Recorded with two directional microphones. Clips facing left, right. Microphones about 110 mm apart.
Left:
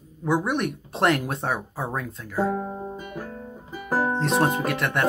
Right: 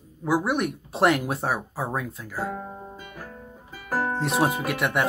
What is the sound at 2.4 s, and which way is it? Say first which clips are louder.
Music: left 7 dB; 20° left (ahead or behind).